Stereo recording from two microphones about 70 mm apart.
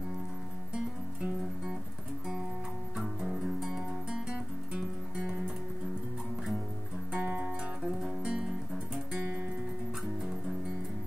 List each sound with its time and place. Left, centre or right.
3.0 s music: centre
7.1 s music: centre